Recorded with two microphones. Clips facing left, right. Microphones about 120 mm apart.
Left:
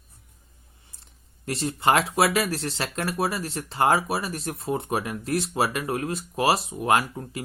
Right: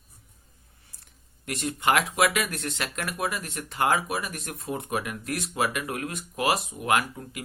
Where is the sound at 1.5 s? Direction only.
30° left (ahead or behind).